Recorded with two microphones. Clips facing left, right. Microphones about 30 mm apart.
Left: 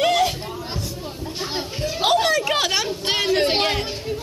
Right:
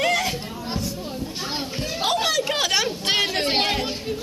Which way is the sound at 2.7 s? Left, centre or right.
Centre.